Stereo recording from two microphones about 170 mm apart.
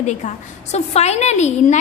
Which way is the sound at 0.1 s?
40° left (ahead or behind).